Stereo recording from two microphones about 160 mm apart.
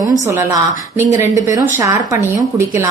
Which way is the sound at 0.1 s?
20° right (ahead or behind).